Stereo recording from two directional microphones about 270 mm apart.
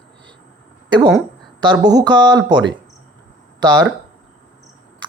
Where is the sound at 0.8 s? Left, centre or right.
Centre.